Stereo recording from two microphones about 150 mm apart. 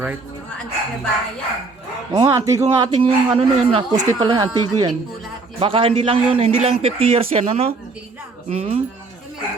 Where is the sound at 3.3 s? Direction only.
40° right (ahead or behind).